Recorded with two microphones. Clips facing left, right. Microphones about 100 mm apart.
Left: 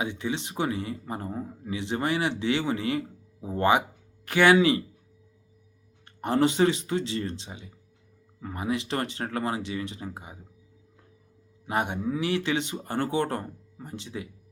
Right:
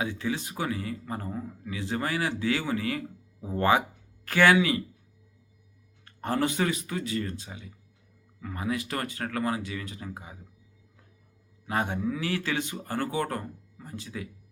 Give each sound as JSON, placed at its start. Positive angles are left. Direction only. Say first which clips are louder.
{"t": 0.0, "sound": "speech", "louder": "even", "side_deg": 20}
{"t": 6.2, "sound": "speech", "louder": "left 5 dB", "side_deg": 20}
{"t": 11.6, "sound": "speech", "louder": "left 1 dB", "side_deg": 20}